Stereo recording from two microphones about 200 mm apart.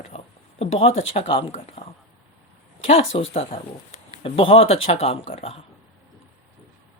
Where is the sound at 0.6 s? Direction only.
30° left (ahead or behind).